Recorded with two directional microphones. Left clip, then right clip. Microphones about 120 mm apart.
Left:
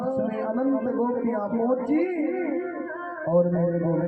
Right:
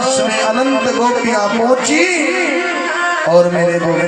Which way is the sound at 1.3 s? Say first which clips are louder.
Right 13 dB; 50° right (ahead or behind).